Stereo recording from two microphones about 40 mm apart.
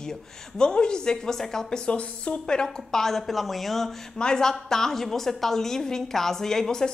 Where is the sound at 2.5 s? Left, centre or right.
Centre.